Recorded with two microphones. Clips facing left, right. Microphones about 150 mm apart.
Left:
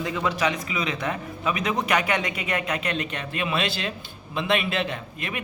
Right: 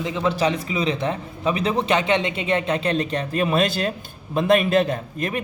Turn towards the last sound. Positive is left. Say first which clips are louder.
# right 7 dB
turn(degrees=-40)  # may be behind; listen again after turning